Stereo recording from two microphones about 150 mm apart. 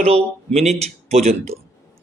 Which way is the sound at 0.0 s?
45° right (ahead or behind).